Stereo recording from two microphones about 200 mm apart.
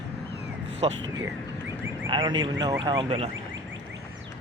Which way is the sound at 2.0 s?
25° right (ahead or behind).